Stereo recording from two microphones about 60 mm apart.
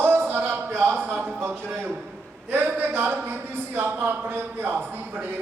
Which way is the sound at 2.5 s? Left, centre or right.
Right.